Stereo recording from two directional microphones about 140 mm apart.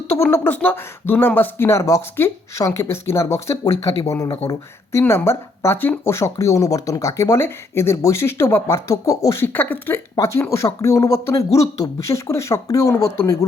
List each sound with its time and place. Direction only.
0.2 s speech: 15° left (ahead or behind)